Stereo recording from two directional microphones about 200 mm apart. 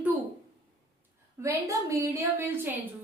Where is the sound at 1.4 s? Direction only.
15° right (ahead or behind).